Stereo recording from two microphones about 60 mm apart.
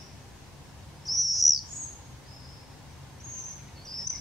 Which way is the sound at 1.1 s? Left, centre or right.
Centre.